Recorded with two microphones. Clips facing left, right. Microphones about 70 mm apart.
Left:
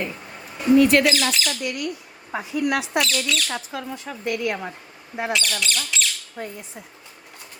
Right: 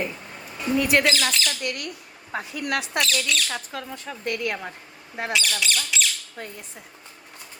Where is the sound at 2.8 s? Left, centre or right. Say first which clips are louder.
Left 2 dB; centre.